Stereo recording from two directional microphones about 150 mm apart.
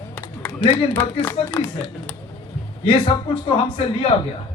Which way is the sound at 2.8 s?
35° left (ahead or behind).